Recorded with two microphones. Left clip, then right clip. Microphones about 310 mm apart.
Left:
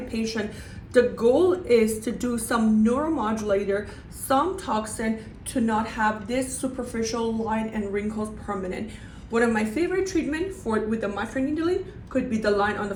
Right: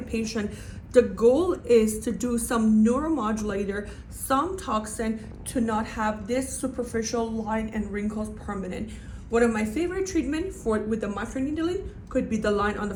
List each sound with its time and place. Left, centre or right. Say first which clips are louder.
0.2 s a woman's voice: left 4 dB; centre
9.3 s a woman's voice: even; centre